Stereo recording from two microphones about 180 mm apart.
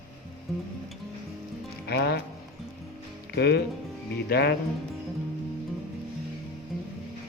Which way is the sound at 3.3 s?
65° left (ahead or behind).